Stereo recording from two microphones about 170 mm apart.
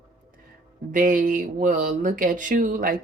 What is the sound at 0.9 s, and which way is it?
Speech, 50° right (ahead or behind).